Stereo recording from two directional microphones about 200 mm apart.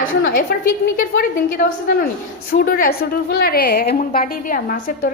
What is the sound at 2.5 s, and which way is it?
A woman's voice, 45° left (ahead or behind).